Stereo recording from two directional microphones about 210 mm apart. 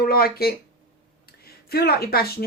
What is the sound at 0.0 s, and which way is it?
Speech, 45° left (ahead or behind).